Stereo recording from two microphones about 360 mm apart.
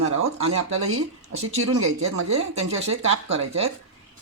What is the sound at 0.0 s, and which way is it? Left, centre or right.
Speech, right.